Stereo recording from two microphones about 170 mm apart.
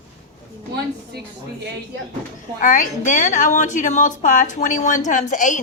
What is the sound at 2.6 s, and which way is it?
A woman's voice, 50° left (ahead or behind).